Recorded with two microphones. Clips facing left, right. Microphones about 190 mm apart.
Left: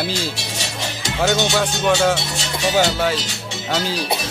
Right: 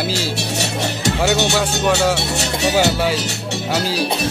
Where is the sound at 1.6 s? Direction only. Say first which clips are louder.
Even; 5° right (ahead or behind).